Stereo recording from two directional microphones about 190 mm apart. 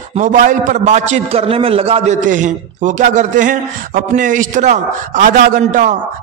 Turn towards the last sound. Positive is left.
turn(degrees=-45)  # may be behind; listen again after turning